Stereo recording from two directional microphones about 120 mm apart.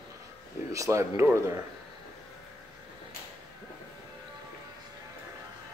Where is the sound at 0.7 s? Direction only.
25° right (ahead or behind).